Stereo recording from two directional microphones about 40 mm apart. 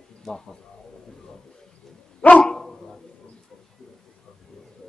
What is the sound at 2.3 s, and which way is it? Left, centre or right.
Dog, centre.